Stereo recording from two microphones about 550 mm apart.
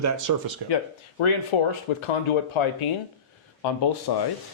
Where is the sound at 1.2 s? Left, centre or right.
Left.